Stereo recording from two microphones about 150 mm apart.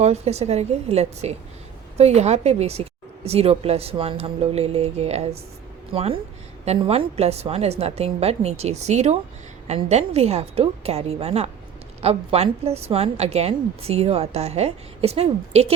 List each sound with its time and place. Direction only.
0.0 s a woman's voice: 45° right (ahead or behind)